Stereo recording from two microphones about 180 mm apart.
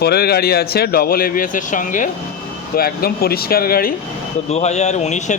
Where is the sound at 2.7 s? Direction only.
55° left (ahead or behind).